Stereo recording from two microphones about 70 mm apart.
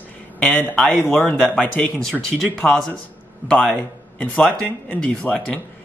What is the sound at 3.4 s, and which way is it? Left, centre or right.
Speech, centre.